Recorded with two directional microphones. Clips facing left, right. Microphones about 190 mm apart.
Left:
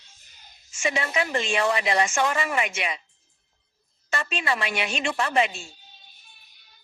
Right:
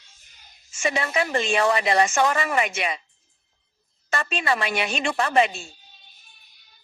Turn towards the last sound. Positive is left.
turn(degrees=-40)  # may be behind; listen again after turning